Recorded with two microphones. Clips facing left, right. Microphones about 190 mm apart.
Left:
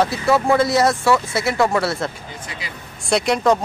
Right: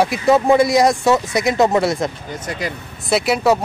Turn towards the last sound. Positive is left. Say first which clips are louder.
# right 1 dB
turn(degrees=-5)  # may be behind; listen again after turning